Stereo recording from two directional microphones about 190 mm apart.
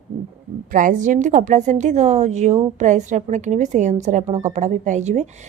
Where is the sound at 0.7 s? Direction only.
45° right (ahead or behind).